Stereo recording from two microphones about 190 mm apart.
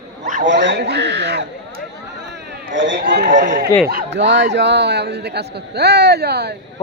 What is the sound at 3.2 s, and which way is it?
Speech, 45° right (ahead or behind).